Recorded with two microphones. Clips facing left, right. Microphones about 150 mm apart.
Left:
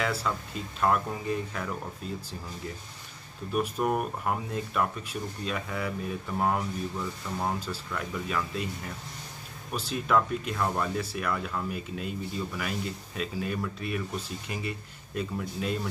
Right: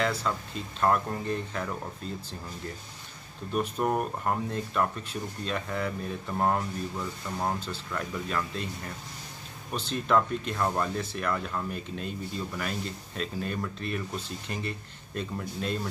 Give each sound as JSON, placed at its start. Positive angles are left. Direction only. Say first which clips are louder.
{"t": 0.0, "sound": "speech", "louder": "right 1 dB", "side_deg": 5}
{"t": 3.5, "sound": "speech", "louder": "even", "side_deg": 5}
{"t": 7.6, "sound": "speech", "louder": "even", "side_deg": 5}
{"t": 9.8, "sound": "speech", "louder": "right 1 dB", "side_deg": 5}